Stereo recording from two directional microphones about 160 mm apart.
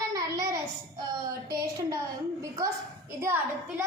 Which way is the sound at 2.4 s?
20° right (ahead or behind).